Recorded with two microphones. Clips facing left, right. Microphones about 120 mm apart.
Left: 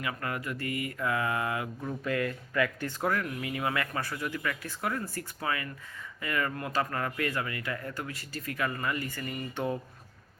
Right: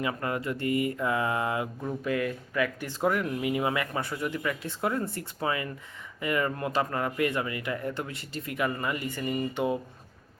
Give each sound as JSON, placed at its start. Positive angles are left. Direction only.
{"t": 0.0, "sound": "speech", "side_deg": -25}
{"t": 1.8, "sound": "speech", "side_deg": -15}